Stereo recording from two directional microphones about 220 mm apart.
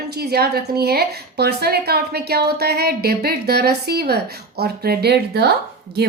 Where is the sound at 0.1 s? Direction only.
45° right (ahead or behind).